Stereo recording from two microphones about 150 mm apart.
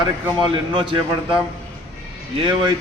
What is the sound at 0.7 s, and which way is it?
Speech, 35° right (ahead or behind).